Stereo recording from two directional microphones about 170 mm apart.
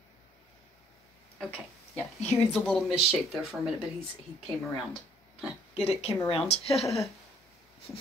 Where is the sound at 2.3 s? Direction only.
5° left (ahead or behind).